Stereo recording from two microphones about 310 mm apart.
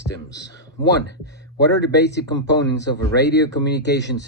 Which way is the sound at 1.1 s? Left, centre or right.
Left.